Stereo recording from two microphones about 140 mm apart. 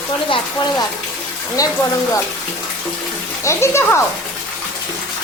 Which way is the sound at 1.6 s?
25° left (ahead or behind).